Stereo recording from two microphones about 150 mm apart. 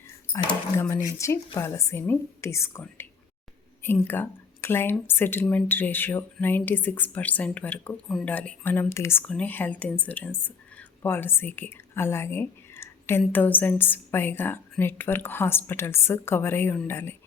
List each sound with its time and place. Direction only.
0.8 s speech: 25° left (ahead or behind)